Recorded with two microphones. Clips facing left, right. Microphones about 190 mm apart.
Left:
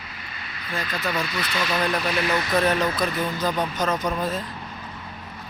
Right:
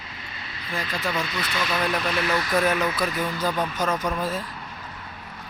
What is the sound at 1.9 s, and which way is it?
Speech, centre (ahead or behind).